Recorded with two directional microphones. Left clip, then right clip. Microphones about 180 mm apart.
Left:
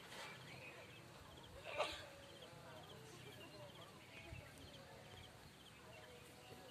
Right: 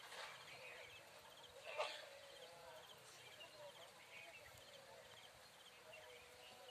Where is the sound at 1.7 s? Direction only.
40° left (ahead or behind).